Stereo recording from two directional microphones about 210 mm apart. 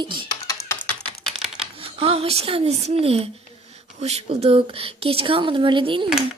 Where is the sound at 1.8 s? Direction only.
25° right (ahead or behind).